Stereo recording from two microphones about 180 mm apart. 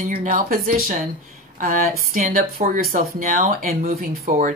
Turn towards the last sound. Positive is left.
turn(degrees=-45)  # may be behind; listen again after turning